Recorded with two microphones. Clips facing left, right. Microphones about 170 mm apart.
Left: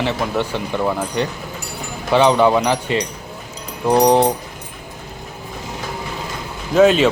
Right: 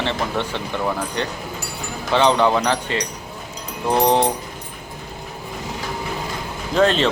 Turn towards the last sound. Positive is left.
turn(degrees=5)  # may be behind; listen again after turning